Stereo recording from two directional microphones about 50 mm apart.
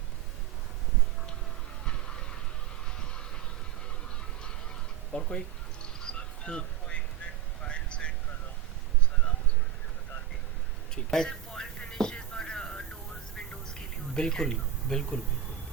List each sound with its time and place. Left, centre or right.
3.0 s vehicle: centre
5.1 s speech: left
5.8 s a sound: centre
7.6 s vehicle: left
10.9 s speech: centre
11.9 s a sound: centre
14.1 s speech: centre